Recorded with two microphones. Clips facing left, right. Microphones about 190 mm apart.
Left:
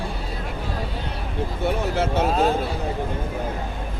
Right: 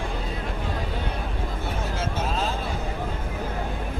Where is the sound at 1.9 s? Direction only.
65° left (ahead or behind).